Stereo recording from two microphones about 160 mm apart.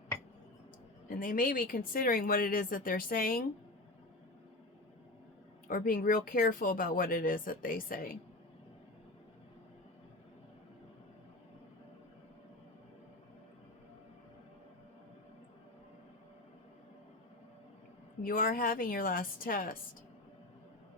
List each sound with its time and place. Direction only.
1.0 s speech: 60° left (ahead or behind)
5.6 s speech: 60° left (ahead or behind)
18.2 s speech: 60° left (ahead or behind)